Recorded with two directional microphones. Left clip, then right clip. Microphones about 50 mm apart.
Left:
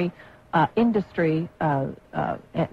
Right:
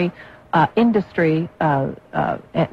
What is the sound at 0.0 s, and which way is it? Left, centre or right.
A woman's voice, right.